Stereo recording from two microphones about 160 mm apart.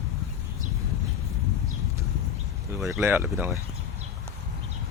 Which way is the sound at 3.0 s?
10° right (ahead or behind).